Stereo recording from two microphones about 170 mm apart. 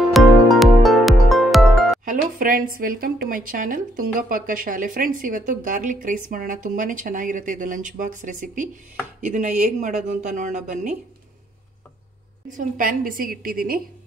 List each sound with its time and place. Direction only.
0.0 s music: centre (ahead or behind)
2.0 s a woman's voice: 55° right (ahead or behind)
12.4 s a woman's voice: 50° right (ahead or behind)